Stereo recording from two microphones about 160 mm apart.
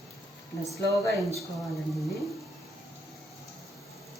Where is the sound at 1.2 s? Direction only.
20° right (ahead or behind).